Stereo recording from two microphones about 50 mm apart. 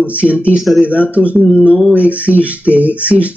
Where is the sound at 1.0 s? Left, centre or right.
Right.